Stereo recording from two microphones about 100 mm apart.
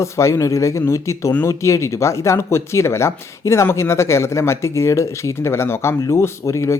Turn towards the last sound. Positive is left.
turn(degrees=30)  # may be behind; listen again after turning